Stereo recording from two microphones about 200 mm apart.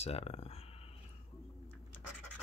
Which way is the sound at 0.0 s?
30° left (ahead or behind).